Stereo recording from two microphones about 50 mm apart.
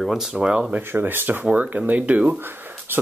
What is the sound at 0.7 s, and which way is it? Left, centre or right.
Speech, right.